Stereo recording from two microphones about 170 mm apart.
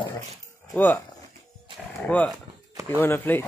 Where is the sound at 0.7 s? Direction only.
10° left (ahead or behind).